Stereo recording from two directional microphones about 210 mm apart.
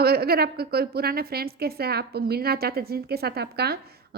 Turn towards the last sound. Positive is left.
turn(degrees=-50)  # may be behind; listen again after turning